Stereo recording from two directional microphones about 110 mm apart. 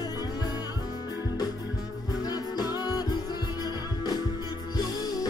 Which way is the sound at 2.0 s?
35° left (ahead or behind).